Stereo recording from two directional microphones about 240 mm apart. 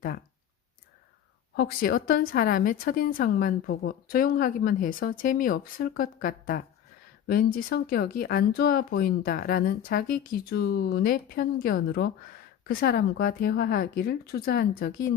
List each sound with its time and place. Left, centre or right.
1.5 s a woman's voice: left